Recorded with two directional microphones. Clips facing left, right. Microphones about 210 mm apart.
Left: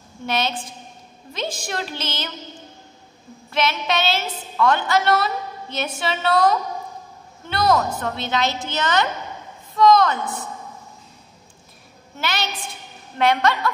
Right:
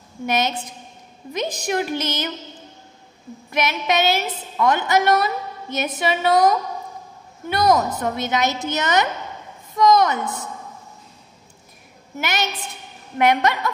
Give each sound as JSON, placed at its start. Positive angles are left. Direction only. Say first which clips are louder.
{"t": 0.3, "sound": "a woman's voice", "louder": "right 2 dB", "side_deg": -20}
{"t": 3.5, "sound": "a woman's voice", "louder": "right 1 dB", "side_deg": -15}
{"t": 12.2, "sound": "a woman's voice", "louder": "right 2 dB", "side_deg": -20}